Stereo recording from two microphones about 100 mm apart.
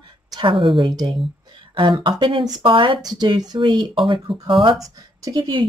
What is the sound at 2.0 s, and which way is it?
Speech, 55° right (ahead or behind).